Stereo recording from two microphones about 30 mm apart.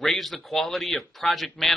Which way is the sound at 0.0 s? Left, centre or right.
Centre.